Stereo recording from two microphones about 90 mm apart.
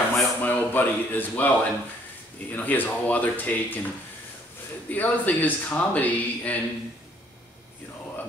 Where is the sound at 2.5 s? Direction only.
20° left (ahead or behind).